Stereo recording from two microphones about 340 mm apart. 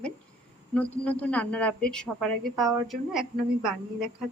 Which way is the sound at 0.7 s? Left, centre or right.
Centre.